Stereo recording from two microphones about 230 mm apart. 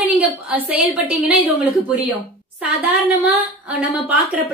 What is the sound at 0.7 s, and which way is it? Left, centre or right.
A woman's voice, centre.